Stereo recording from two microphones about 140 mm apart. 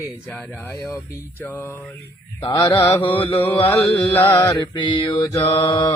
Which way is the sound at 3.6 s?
15° left (ahead or behind).